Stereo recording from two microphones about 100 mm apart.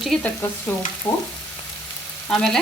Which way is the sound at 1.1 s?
20° left (ahead or behind).